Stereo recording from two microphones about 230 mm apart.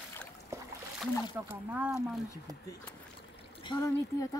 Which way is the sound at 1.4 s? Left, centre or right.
Centre.